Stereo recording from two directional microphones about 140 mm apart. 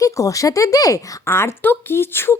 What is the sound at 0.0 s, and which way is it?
Speech, 25° left (ahead or behind).